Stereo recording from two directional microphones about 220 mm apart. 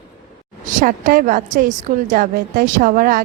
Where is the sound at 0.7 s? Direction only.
35° right (ahead or behind).